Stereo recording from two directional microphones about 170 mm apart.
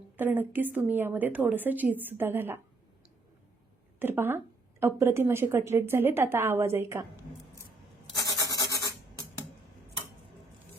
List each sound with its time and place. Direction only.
0.2 s a woman's voice: 10° right (ahead or behind)
4.0 s a woman's voice: 10° right (ahead or behind)
8.4 s rub: 20° left (ahead or behind)